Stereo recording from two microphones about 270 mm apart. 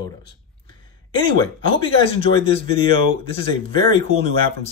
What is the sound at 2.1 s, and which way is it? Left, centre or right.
Speech, left.